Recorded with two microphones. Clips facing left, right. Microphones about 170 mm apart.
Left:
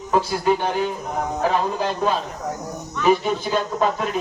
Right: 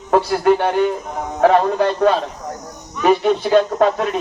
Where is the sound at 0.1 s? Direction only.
65° right (ahead or behind).